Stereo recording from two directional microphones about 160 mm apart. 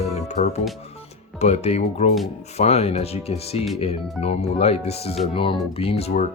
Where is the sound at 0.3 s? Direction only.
45° left (ahead or behind).